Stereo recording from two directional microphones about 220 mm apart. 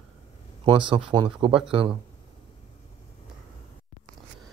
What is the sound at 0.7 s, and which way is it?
Speech, 20° right (ahead or behind).